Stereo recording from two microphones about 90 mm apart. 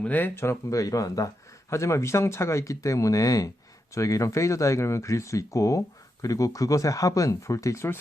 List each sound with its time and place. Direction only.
0.0 s speech: 15° left (ahead or behind)
0.3 s speech: 35° left (ahead or behind)